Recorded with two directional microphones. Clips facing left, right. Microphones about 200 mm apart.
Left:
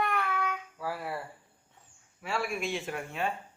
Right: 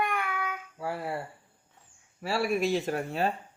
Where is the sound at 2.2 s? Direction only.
35° right (ahead or behind).